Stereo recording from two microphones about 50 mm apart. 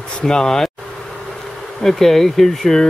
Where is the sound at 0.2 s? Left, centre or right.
Centre.